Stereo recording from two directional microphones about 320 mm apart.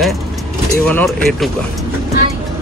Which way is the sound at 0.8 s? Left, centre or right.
Centre.